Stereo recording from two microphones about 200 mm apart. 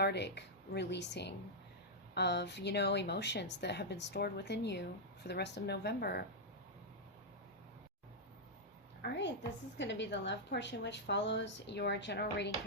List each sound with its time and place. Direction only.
0.0 s speech: 55° left (ahead or behind)
9.0 s a woman's voice: 60° left (ahead or behind)